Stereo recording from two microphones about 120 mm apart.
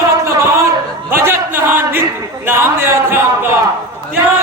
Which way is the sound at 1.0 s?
20° right (ahead or behind).